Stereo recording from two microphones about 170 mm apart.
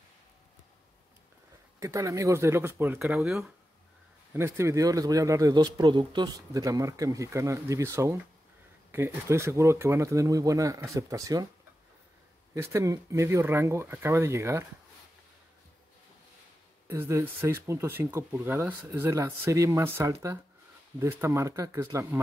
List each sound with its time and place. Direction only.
1.8 s speech: 20° right (ahead or behind)
4.3 s speech: 15° right (ahead or behind)
12.5 s speech: 20° right (ahead or behind)
16.8 s speech: 15° right (ahead or behind)